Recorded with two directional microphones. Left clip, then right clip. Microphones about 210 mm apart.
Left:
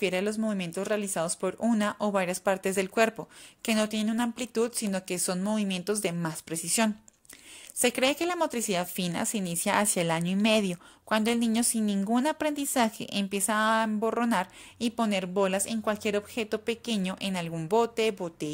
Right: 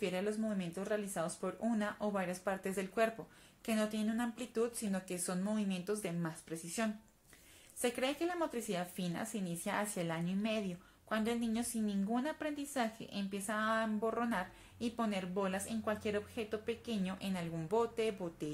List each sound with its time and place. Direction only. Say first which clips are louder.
0.0 s a woman's voice: left 9 dB; 40° left (ahead or behind)